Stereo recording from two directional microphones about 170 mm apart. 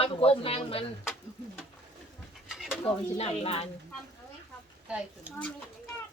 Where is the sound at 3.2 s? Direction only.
35° left (ahead or behind).